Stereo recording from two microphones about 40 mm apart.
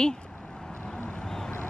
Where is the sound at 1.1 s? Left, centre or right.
Centre.